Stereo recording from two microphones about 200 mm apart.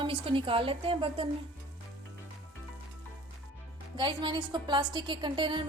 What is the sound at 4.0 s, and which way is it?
A woman's voice, 25° right (ahead or behind).